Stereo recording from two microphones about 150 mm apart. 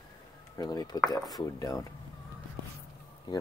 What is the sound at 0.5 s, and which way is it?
Speech, 25° left (ahead or behind).